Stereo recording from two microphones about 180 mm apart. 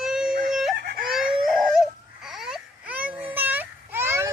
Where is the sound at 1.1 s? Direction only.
Centre (ahead or behind).